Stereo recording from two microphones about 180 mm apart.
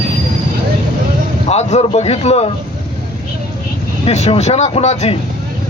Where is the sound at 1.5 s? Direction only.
35° left (ahead or behind).